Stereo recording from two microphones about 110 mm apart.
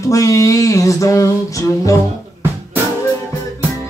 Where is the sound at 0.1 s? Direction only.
30° left (ahead or behind).